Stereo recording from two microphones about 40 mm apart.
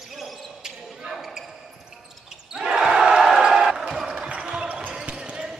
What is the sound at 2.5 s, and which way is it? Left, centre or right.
Basketball bounce, centre.